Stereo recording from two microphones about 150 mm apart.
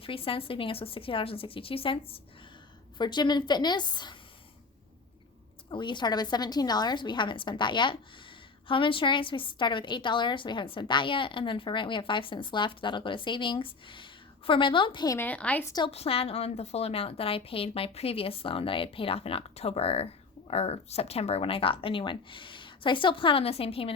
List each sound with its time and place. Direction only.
0.0 s a woman's voice: 35° left (ahead or behind)
5.7 s a woman's voice: 30° left (ahead or behind)
15.2 s a woman's voice: 10° left (ahead or behind)
15.6 s a woman's voice: 25° left (ahead or behind)
15.9 s a woman's voice: 40° left (ahead or behind)